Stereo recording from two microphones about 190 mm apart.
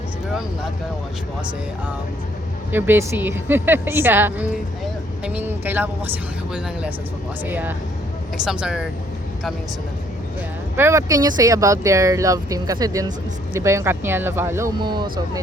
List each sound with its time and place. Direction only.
2.7 s speech: 10° right (ahead or behind)
7.4 s speech: 10° right (ahead or behind)
10.8 s speech: 15° right (ahead or behind)
14.8 s speech: 25° right (ahead or behind)